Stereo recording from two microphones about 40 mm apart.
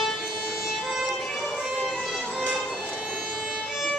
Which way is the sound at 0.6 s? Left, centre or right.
Centre.